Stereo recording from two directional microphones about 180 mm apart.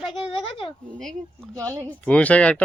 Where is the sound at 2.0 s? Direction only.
5° left (ahead or behind).